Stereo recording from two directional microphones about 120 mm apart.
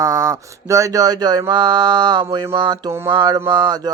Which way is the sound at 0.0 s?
25° right (ahead or behind).